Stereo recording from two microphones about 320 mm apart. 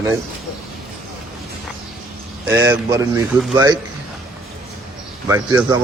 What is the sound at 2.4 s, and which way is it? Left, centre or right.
Speech, centre.